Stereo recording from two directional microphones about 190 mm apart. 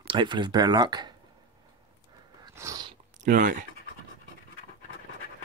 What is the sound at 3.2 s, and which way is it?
Speech, 45° right (ahead or behind).